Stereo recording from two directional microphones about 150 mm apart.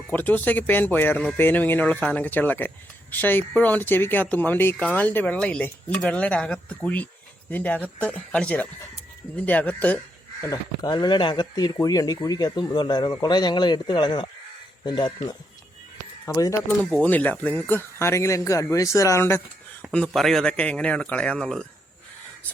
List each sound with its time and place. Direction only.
0.1 s speech: 10° left (ahead or behind)
10.4 s speech: 25° left (ahead or behind)
16.2 s speech: 20° left (ahead or behind)
16.6 s speech: 5° left (ahead or behind)
19.9 s speech: 5° left (ahead or behind)